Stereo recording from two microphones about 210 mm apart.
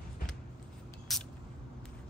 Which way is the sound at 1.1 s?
Centre (ahead or behind).